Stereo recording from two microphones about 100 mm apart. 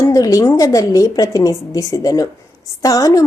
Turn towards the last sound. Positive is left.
turn(degrees=35)  # may be behind; listen again after turning